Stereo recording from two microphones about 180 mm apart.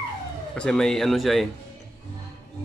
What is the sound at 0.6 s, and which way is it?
Speech, 5° left (ahead or behind).